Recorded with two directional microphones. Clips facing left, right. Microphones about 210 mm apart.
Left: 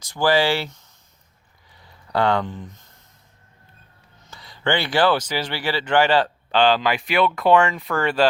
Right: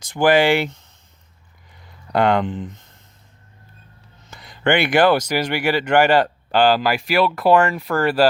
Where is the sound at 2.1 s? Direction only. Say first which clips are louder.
Right 3 dB; 15° right (ahead or behind).